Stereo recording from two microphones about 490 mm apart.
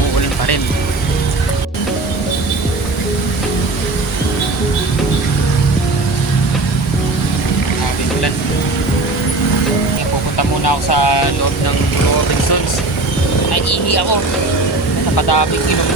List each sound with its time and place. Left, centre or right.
10.3 s vehicle: left
13.5 s vehicle: left